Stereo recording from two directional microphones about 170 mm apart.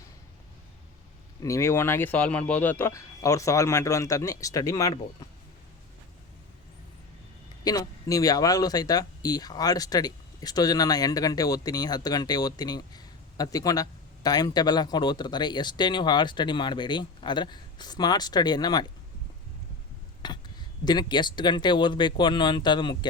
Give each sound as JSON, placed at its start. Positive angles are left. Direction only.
{"t": 1.4, "sound": "speech", "side_deg": 15}
{"t": 7.6, "sound": "speech", "side_deg": 20}
{"t": 20.2, "sound": "speech", "side_deg": 25}